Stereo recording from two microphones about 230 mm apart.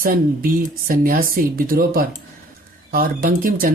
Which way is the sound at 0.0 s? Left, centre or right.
Right.